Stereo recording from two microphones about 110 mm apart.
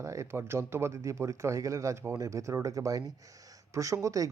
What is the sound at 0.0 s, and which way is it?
Speech, 25° right (ahead or behind).